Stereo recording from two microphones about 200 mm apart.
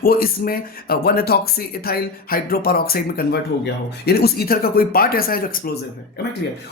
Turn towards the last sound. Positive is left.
turn(degrees=45)  # may be behind; listen again after turning